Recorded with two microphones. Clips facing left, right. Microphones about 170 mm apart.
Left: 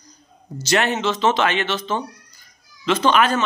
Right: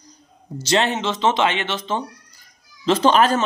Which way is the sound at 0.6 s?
25° right (ahead or behind).